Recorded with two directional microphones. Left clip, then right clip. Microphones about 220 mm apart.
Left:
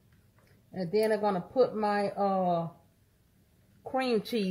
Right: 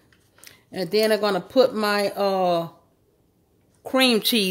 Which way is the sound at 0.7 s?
90° right.